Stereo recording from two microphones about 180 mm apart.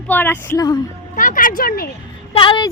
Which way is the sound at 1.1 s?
45° left (ahead or behind).